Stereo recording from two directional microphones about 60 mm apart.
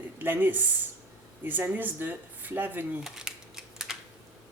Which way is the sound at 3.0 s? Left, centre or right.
Centre.